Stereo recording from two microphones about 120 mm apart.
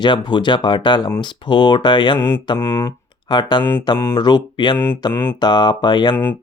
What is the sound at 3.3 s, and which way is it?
Speech, 40° left (ahead or behind).